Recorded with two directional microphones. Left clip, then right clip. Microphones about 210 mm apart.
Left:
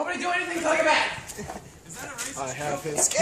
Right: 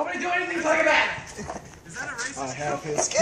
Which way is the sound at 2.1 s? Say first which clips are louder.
Even; 35° left (ahead or behind).